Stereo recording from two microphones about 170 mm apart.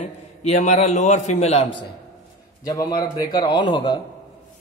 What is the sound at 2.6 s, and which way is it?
A man's voice, 20° left (ahead or behind).